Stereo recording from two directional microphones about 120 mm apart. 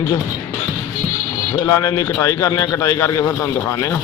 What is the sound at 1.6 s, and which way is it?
A man's voice, 30° left (ahead or behind).